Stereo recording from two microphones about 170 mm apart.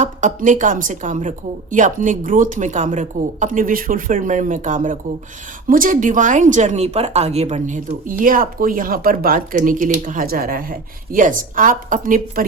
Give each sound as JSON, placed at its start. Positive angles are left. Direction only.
{"t": 0.0, "sound": "speech", "side_deg": -45}